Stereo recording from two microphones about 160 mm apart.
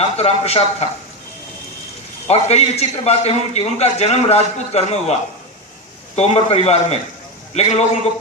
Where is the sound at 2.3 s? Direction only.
40° left (ahead or behind).